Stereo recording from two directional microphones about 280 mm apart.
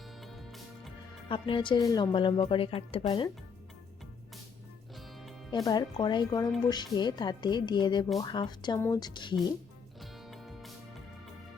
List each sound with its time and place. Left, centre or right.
0.2 s music: centre
1.3 s a woman's voice: centre
5.6 s a woman's voice: centre
10.0 s music: centre